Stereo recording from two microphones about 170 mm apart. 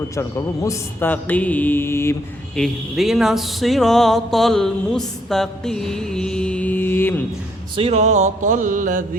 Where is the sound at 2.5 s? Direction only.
Centre (ahead or behind).